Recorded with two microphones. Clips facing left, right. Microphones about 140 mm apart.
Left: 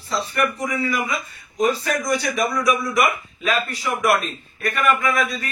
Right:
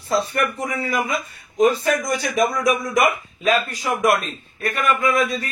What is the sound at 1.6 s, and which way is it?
A man's voice, 45° right (ahead or behind).